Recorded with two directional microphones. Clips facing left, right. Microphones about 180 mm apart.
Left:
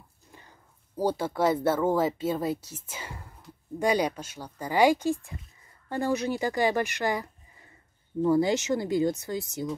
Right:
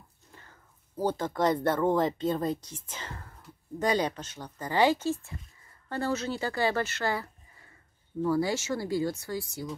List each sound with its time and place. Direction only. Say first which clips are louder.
0.3 s speech: left 2 dB; 15° left (ahead or behind)